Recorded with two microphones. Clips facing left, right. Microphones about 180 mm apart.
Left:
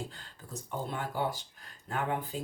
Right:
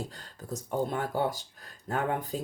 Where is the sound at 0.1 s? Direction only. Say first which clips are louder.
Right 6 dB; 45° right (ahead or behind).